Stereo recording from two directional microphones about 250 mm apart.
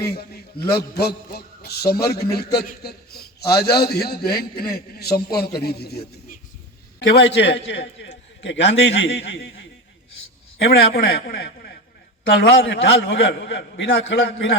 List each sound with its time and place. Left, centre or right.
0.0 s a man's voice: left
7.0 s a man's voice: left